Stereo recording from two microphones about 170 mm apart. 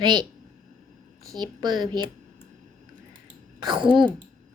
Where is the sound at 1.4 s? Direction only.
25° right (ahead or behind).